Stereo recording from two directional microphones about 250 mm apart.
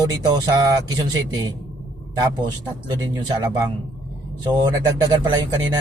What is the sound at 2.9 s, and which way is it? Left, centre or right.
A man's voice, centre.